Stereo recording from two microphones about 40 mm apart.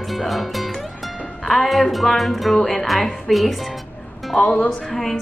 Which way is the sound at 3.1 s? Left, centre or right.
Centre.